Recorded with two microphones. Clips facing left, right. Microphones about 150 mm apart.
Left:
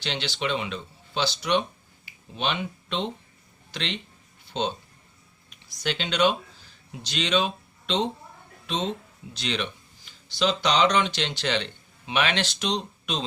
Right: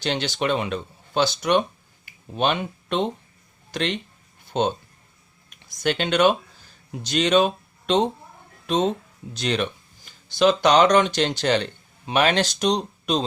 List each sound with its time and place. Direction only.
0.0 s speech: 45° right (ahead or behind)
4.4 s a sound: 50° right (ahead or behind)
5.5 s speech: 50° right (ahead or behind)